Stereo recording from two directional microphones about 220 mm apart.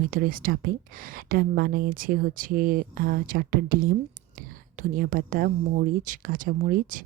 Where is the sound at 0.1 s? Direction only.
40° right (ahead or behind).